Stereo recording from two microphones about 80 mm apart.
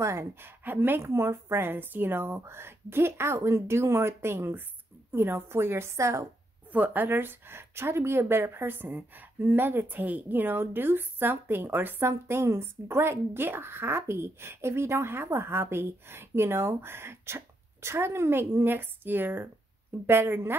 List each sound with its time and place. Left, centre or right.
0.0 s a woman's voice: right
6.7 s a woman's voice: right